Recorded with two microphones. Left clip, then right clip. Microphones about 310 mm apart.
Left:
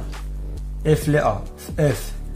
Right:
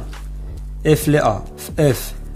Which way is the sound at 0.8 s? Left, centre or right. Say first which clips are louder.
Right 4 dB; centre.